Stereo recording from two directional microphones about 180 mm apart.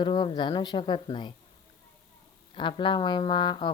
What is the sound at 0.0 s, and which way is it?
Speech, 25° left (ahead or behind).